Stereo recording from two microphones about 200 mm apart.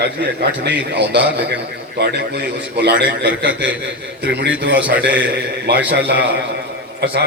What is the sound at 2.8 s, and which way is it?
Speech, 60° right (ahead or behind).